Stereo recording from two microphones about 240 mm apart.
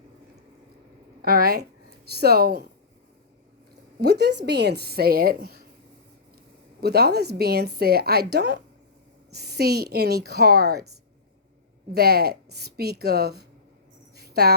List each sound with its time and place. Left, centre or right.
1.2 s a woman's voice: right
4.0 s a woman's voice: right
6.8 s a woman's voice: right
11.9 s a woman's voice: right
14.2 s a sound: right